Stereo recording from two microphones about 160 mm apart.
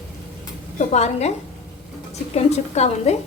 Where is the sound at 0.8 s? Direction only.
45° left (ahead or behind).